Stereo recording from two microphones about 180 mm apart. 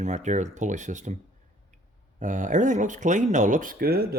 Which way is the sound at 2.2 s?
45° right (ahead or behind).